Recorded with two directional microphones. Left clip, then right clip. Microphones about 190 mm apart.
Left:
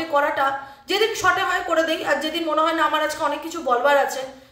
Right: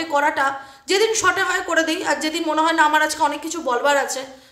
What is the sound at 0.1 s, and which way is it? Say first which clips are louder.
A woman's voice: right 1 dB; 30° right (ahead or behind).